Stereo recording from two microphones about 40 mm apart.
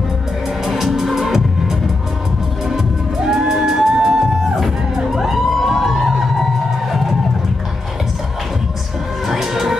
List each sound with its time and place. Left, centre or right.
0.7 s music: centre
3.2 s music: centre
5.6 s a sound: centre
9.3 s music: centre